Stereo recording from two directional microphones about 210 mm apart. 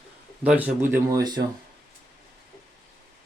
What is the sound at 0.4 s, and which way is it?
Speech, 5° right (ahead or behind).